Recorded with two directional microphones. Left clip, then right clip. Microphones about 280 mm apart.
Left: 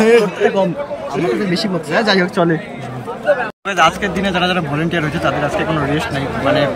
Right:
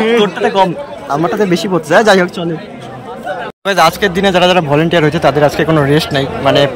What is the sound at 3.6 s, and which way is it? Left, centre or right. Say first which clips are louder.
Speech: right 4 dB; centre.